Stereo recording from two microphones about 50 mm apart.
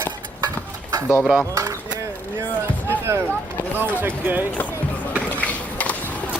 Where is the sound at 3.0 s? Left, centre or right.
Right.